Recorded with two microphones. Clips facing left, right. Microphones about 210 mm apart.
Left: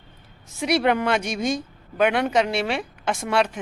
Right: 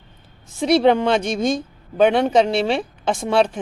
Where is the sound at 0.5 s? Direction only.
30° right (ahead or behind).